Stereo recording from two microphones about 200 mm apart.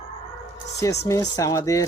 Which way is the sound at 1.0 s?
15° left (ahead or behind).